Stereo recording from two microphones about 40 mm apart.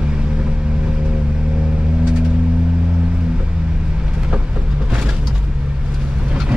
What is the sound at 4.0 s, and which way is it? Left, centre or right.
Vehicle, right.